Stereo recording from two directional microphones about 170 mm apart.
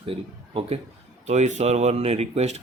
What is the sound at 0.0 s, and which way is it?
Speech, 30° right (ahead or behind).